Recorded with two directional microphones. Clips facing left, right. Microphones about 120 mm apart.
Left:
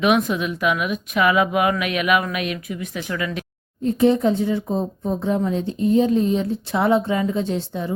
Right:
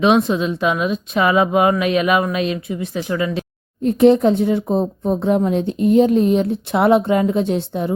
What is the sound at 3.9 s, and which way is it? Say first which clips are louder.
Speech: right 5 dB; 65° right (ahead or behind).